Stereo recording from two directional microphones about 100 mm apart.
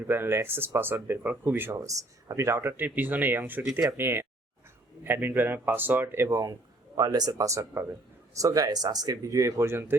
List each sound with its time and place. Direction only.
0.0 s a man's voice: 20° right (ahead or behind)
1.7 s a man's voice: 35° right (ahead or behind)